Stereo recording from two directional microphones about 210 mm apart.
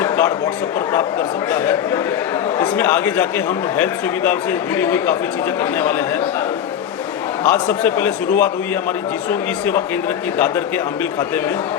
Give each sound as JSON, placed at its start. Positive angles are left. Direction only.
{"t": 0.0, "sound": "a sound", "side_deg": 15}
{"t": 1.5, "sound": "a man's voice", "side_deg": 10}
{"t": 7.4, "sound": "a man's voice", "side_deg": 5}